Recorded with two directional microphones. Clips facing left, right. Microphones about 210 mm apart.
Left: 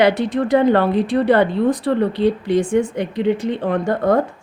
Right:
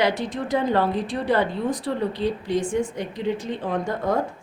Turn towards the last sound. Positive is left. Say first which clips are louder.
# left 7 dB
turn(degrees=65)  # may be behind; listen again after turning